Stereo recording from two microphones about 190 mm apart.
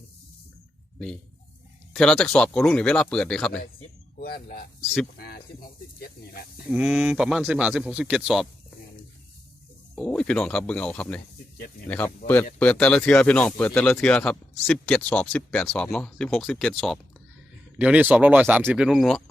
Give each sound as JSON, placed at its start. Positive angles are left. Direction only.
{"t": 0.9, "sound": "speech", "side_deg": 5}
{"t": 4.2, "sound": "a sound", "side_deg": 55}
{"t": 5.1, "sound": "speech", "side_deg": 55}
{"t": 6.7, "sound": "speech", "side_deg": -5}
{"t": 9.9, "sound": "speech", "side_deg": 5}